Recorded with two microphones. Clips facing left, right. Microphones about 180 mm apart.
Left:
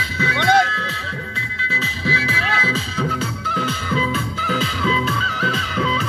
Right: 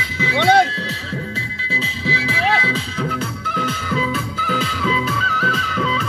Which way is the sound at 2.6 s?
15° right (ahead or behind).